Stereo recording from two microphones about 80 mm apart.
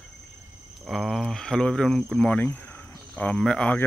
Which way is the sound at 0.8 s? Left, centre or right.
Centre.